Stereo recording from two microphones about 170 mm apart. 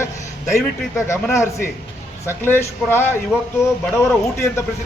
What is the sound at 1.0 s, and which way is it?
A man's voice, 15° left (ahead or behind).